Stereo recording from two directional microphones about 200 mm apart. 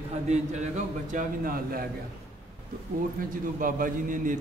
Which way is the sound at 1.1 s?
45° right (ahead or behind).